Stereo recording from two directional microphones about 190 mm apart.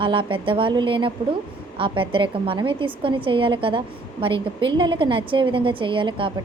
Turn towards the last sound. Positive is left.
turn(degrees=-25)  # may be behind; listen again after turning